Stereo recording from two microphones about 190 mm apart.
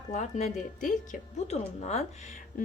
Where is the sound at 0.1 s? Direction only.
35° left (ahead or behind).